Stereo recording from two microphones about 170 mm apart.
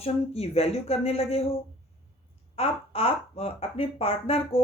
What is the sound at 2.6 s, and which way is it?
Speech, 35° left (ahead or behind).